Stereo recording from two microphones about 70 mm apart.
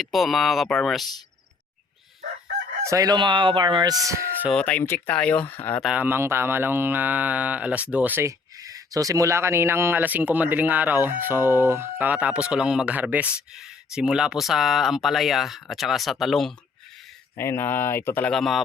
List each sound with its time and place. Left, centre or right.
0.0 s speech: centre
2.8 s crowing: right
3.6 s speech: right
4.5 s speech: centre
6.1 s speech: right
8.2 s speech: right
10.0 s speech: right
11.9 s speech: centre
17.3 s speech: left
18.3 s speech: centre